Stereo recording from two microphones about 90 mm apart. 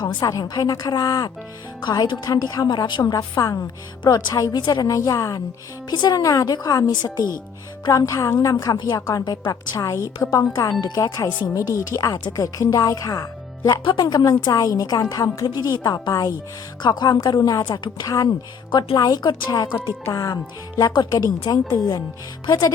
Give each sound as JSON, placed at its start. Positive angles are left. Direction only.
{"t": 0.2, "sound": "a woman's voice", "side_deg": 45}
{"t": 3.1, "sound": "a woman's voice", "side_deg": 45}
{"t": 4.0, "sound": "a woman's voice", "side_deg": 55}
{"t": 4.4, "sound": "a woman's voice", "side_deg": 40}
{"t": 5.9, "sound": "a woman's voice", "side_deg": 55}
{"t": 13.8, "sound": "a woman's voice", "side_deg": 55}
{"t": 18.7, "sound": "a woman's voice", "side_deg": 60}
{"t": 18.9, "sound": "a woman's voice", "side_deg": 45}